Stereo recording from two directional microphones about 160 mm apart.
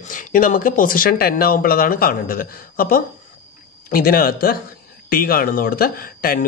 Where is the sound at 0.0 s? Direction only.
55° left (ahead or behind).